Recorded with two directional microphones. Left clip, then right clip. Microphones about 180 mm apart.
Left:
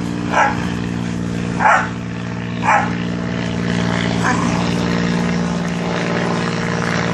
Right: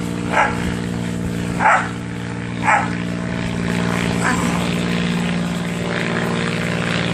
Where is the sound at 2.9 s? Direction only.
35° left (ahead or behind).